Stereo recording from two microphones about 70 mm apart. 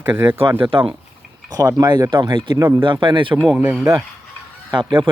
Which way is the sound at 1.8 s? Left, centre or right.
Right.